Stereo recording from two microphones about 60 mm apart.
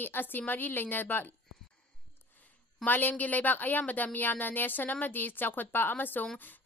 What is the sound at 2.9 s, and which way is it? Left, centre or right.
A woman's voice, left.